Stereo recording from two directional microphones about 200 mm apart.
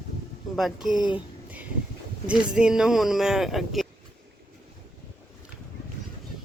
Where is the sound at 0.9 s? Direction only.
20° left (ahead or behind).